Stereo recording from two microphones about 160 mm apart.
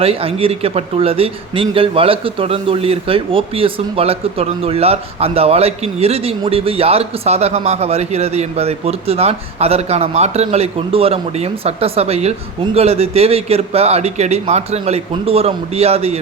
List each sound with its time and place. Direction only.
0.0 s speech: 35° right (ahead or behind)